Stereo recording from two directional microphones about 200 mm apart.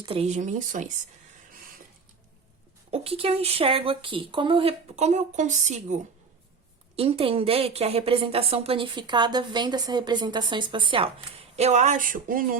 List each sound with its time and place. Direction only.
0.0 s speech: 30° right (ahead or behind)
2.9 s a woman's voice: 30° right (ahead or behind); by 12.5 s 45° right (ahead or behind)